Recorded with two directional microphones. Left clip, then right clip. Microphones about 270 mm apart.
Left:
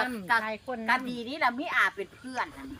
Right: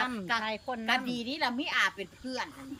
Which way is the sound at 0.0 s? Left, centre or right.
Centre.